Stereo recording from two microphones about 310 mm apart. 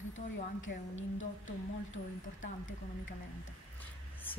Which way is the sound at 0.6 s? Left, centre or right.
Left.